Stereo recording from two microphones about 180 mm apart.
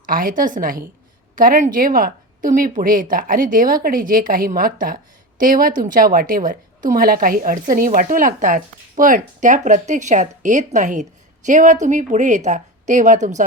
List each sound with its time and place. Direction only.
0.0 s a woman's voice: 50° right (ahead or behind)